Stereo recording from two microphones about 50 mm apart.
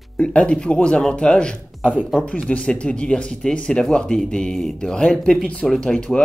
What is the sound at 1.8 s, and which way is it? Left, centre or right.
Speech, right.